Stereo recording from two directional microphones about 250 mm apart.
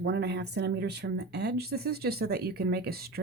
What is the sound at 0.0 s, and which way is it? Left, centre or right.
Speech, right.